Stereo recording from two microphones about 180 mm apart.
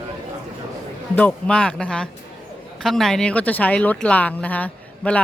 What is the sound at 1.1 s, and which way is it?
Speech, 5° left (ahead or behind).